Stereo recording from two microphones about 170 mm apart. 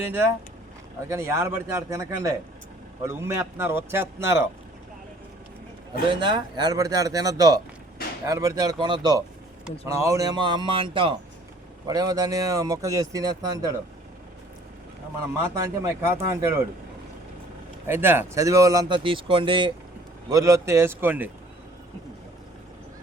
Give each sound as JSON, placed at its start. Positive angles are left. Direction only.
{"t": 1.0, "sound": "speech", "side_deg": -15}
{"t": 6.1, "sound": "speech", "side_deg": -25}
{"t": 15.2, "sound": "speech", "side_deg": -15}
{"t": 17.8, "sound": "speech", "side_deg": -15}